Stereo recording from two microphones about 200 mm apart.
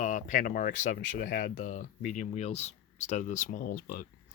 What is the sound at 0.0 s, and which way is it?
Speech, 40° left (ahead or behind).